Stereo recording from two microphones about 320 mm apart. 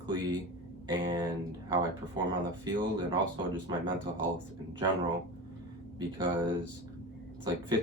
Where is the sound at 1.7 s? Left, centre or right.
Centre.